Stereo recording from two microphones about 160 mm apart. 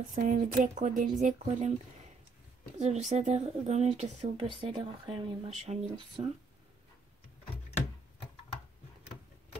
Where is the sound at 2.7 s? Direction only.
45° right (ahead or behind).